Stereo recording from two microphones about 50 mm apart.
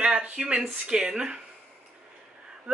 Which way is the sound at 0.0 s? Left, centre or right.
Right.